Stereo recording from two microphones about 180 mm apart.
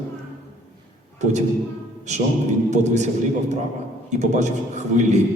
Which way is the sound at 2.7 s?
40° right (ahead or behind).